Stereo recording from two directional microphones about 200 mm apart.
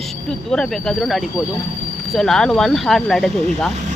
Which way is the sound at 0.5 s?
Centre (ahead or behind).